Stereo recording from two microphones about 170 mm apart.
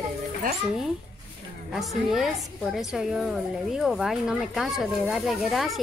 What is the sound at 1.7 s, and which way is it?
A woman's voice, centre (ahead or behind).